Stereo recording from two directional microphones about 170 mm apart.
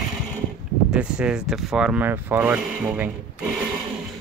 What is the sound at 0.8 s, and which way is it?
Speech, 5° right (ahead or behind).